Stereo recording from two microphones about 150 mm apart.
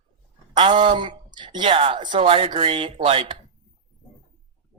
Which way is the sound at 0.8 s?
30° right (ahead or behind).